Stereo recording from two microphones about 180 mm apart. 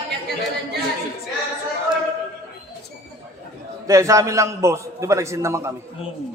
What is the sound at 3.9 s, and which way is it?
A man's voice, 15° right (ahead or behind).